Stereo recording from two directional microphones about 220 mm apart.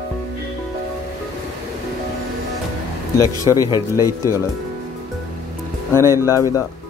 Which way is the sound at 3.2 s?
15° left (ahead or behind).